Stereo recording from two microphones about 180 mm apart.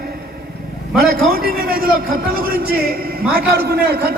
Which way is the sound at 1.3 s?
55° right (ahead or behind).